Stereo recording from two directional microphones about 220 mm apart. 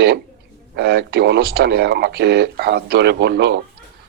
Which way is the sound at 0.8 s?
50° right (ahead or behind).